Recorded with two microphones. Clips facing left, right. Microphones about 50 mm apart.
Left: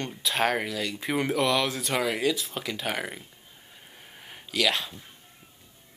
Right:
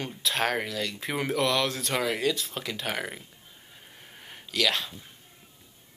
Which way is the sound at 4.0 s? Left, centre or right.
Centre.